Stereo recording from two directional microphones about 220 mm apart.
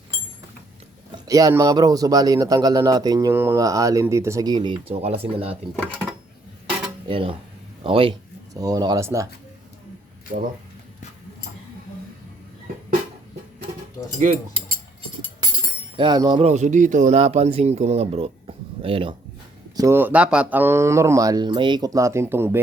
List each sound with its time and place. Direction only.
1.3 s speech: 15° right (ahead or behind)
7.1 s a man's voice: 25° right (ahead or behind)
14.2 s a man's voice: 30° right (ahead or behind)
16.0 s a man's voice: 20° right (ahead or behind)
19.7 s speech: 15° right (ahead or behind)